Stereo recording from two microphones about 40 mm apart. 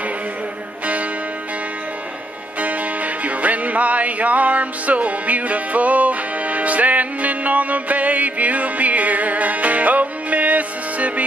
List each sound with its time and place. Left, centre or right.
2.6 s music: right